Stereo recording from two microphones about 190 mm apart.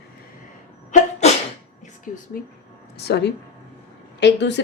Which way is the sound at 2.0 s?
45° left (ahead or behind).